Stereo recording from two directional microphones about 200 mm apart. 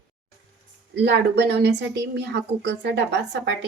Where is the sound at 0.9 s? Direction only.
60° right (ahead or behind).